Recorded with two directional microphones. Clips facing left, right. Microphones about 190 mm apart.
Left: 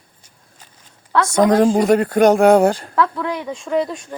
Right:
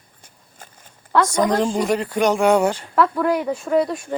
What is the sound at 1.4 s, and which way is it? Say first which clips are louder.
Speech: left 10 dB; 50° left (ahead or behind).